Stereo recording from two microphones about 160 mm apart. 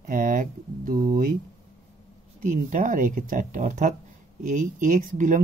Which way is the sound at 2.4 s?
55° right (ahead or behind).